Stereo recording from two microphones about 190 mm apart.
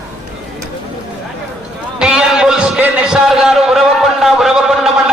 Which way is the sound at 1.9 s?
5° right (ahead or behind).